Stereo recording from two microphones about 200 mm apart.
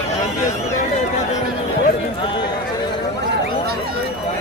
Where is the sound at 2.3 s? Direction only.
20° left (ahead or behind).